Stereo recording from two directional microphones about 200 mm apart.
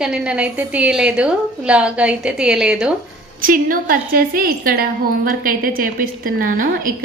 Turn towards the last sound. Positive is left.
turn(degrees=-45)  # may be behind; listen again after turning